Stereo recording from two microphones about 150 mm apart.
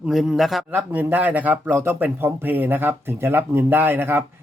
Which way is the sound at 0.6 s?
10° right (ahead or behind).